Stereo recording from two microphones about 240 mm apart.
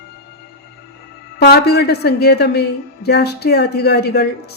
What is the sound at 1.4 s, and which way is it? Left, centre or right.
A woman's voice, left.